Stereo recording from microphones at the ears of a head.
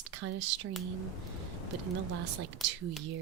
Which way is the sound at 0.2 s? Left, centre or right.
Right.